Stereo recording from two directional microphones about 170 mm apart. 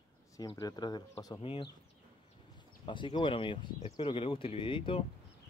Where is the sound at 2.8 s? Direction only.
30° left (ahead or behind).